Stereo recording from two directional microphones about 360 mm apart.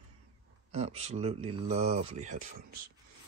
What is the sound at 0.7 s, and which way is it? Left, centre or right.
Speech, centre.